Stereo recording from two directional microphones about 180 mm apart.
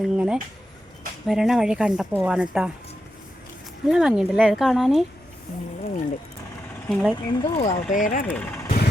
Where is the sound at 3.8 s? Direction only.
5° right (ahead or behind).